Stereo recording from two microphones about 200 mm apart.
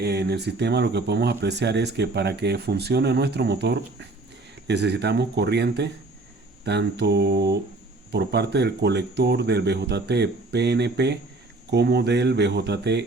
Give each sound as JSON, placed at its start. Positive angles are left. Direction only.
{"t": 0.0, "sound": "speech", "side_deg": -55}